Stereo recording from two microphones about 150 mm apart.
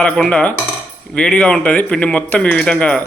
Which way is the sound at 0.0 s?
5° left (ahead or behind).